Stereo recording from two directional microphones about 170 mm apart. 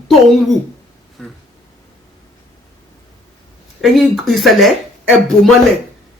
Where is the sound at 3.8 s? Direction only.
Centre (ahead or behind).